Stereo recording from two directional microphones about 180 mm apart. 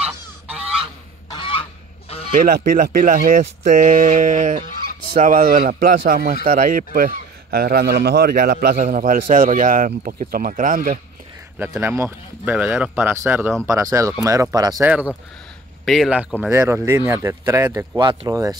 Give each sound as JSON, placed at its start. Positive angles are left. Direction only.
{"t": 0.0, "sound": "goose", "side_deg": -5}
{"t": 1.3, "sound": "fowl", "side_deg": 30}
{"t": 2.3, "sound": "speech", "side_deg": -50}
{"t": 11.5, "sound": "speech", "side_deg": -10}
{"t": 14.9, "sound": "speech", "side_deg": -5}